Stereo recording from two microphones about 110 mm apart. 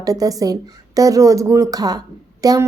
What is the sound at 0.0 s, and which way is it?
A woman's voice, 35° right (ahead or behind).